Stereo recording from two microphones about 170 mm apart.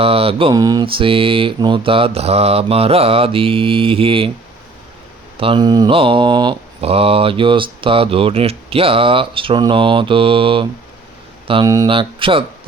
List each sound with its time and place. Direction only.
0.0 s mantra: 35° right (ahead or behind)
0.5 s mantra: 20° right (ahead or behind)
5.4 s mantra: 30° right (ahead or behind)